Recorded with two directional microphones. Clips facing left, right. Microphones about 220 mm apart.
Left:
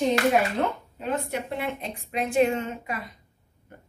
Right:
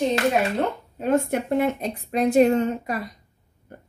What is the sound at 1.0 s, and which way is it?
A woman's voice, 50° right (ahead or behind).